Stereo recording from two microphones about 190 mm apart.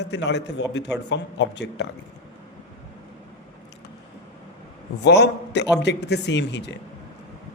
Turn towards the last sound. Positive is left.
turn(degrees=65)  # may be behind; listen again after turning